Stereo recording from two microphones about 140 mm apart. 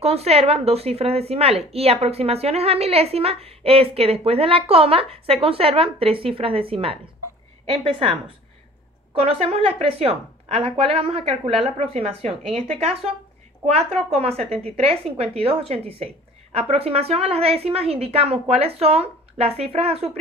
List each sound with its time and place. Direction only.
0.0 s a woman's voice: 45° right (ahead or behind)
9.2 s a woman's voice: 45° right (ahead or behind)